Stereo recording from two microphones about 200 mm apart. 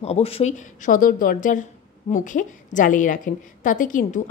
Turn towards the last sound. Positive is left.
turn(degrees=40)  # may be behind; listen again after turning